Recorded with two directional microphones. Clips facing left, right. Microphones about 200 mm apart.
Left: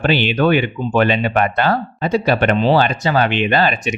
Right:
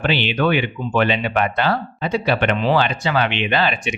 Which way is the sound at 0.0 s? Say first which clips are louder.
Left 4 dB; 45° left (ahead or behind).